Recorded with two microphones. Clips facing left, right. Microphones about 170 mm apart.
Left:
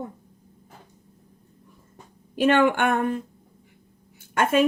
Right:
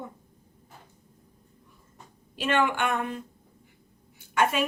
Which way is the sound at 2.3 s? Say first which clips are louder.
Left 7 dB; 50° left (ahead or behind).